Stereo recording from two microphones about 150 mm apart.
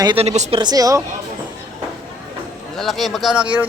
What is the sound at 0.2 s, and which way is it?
Speech, 45° right (ahead or behind).